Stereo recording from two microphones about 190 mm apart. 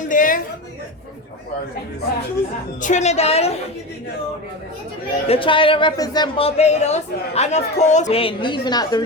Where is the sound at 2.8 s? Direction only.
40° left (ahead or behind).